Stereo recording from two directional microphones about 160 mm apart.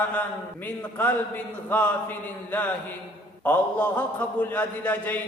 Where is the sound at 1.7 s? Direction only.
10° left (ahead or behind).